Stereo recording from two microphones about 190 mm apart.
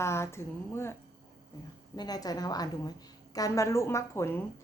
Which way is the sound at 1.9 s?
20° left (ahead or behind).